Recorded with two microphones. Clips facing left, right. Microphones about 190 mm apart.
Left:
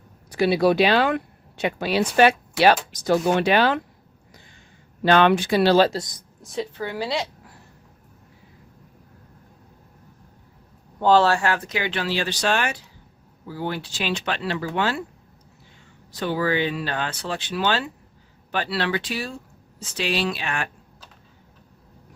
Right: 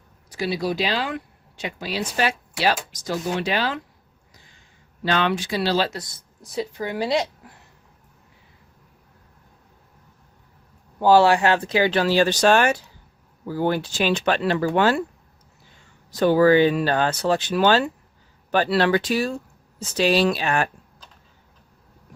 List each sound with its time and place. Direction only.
0.3 s speech: 60° left (ahead or behind)
5.0 s speech: 55° left (ahead or behind)
5.9 s speech: 20° left (ahead or behind)
6.4 s speech: centre (ahead or behind)
6.7 s a woman's voice: 15° right (ahead or behind)
11.0 s speech: 10° right (ahead or behind); by 15.0 s 45° right (ahead or behind)
16.1 s speech: 45° right (ahead or behind)